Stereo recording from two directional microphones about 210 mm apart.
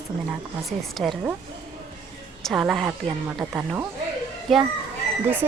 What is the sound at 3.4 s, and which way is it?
Speech, 15° right (ahead or behind).